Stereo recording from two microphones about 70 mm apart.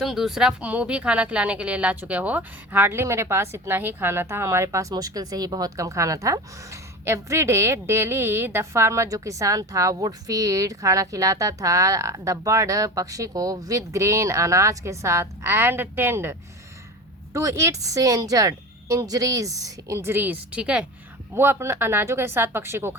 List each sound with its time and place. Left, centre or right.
0.0 s speech: centre
0.6 s a woman's voice: centre; by 6.4 s right
7.0 s a woman's voice: right
17.3 s speech: right
20.2 s a woman's voice: right
21.3 s speech: right